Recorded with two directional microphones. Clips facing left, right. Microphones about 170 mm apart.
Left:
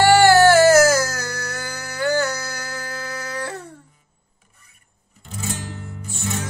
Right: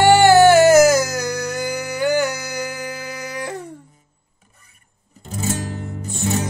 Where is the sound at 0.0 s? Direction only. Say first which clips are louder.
Right 2 dB; 20° right (ahead or behind).